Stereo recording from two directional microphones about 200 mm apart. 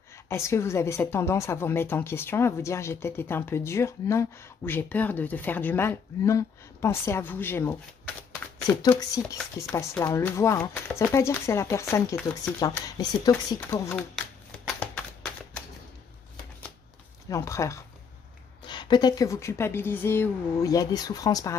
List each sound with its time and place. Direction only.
0.3 s a woman's voice: 15° left (ahead or behind)
17.3 s a woman's voice: 15° left (ahead or behind)